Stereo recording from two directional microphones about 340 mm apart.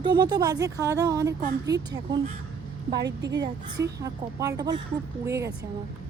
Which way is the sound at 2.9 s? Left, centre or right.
Right.